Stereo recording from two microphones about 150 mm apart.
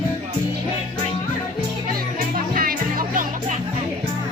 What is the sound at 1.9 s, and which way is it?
Music, 75° right (ahead or behind).